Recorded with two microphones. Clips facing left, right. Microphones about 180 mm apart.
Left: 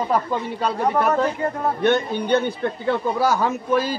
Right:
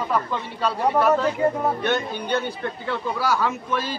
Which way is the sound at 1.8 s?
50° left (ahead or behind).